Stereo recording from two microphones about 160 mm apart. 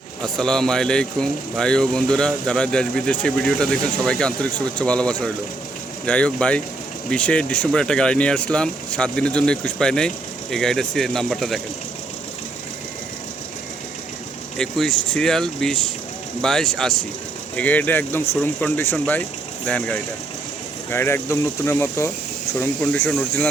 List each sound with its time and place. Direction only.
0.2 s speech: 5° left (ahead or behind)
14.6 s speech: 5° left (ahead or behind)